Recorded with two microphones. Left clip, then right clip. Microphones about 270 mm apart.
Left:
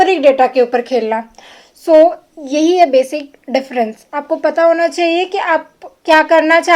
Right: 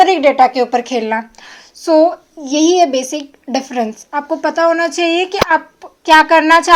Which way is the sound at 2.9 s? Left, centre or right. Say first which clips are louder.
Left 5 dB; right.